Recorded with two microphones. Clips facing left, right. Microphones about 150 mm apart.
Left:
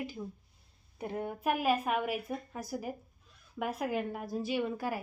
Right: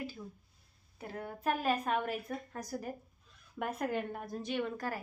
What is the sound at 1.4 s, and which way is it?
A woman's voice, 10° left (ahead or behind).